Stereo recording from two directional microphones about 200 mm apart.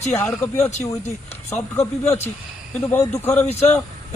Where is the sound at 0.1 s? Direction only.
15° left (ahead or behind).